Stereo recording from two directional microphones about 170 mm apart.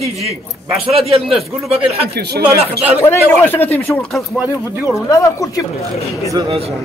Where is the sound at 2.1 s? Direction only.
75° right (ahead or behind).